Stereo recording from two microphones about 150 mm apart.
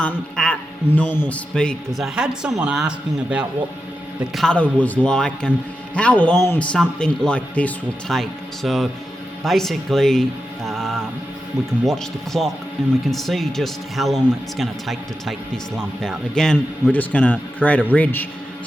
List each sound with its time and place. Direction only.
0.0 s a man's voice: 5° left (ahead or behind)
4.4 s a man's voice: 5° left (ahead or behind)
10.7 s mantra: centre (ahead or behind)
11.9 s a man's voice: centre (ahead or behind)